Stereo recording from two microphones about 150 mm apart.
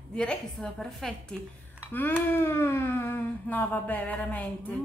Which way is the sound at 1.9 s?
15° left (ahead or behind).